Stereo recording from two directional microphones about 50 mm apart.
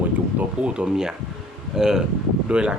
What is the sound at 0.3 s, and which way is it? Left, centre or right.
Speech, right.